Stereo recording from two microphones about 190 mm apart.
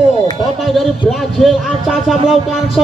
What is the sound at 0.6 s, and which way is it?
Music, centre (ahead or behind).